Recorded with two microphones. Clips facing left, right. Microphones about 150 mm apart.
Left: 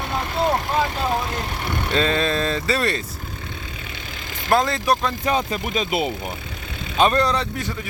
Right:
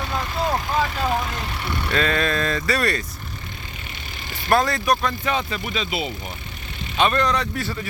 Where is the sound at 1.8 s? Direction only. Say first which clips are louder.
Left 1 dB; 25° left (ahead or behind).